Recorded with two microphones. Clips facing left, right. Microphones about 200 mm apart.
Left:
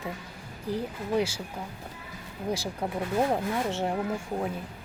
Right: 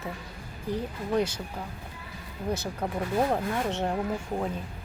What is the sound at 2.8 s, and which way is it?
Speech, 10° left (ahead or behind).